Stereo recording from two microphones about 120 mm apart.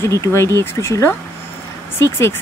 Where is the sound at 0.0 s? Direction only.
25° left (ahead or behind).